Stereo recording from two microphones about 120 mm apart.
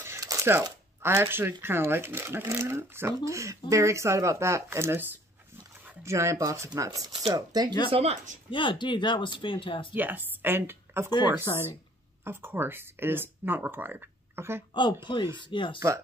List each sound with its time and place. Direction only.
0.0 s a sound: 25° right (ahead or behind)
1.0 s speech: 20° right (ahead or behind)
6.0 s speech: 25° right (ahead or behind)
7.9 s speech: 60° right (ahead or behind)
8.5 s speech: 45° left (ahead or behind)
9.9 s speech: 15° right (ahead or behind)
11.5 s speech: 35° left (ahead or behind)
12.3 s speech: 20° right (ahead or behind)
14.7 s speech: 40° left (ahead or behind)